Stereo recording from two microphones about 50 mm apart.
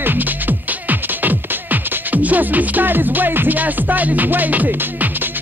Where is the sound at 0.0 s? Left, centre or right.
Right.